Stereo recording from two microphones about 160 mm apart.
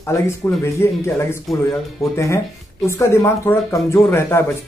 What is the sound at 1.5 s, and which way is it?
Speech, centre (ahead or behind).